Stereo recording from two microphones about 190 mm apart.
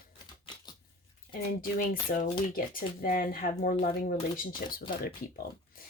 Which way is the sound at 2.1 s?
45° left (ahead or behind).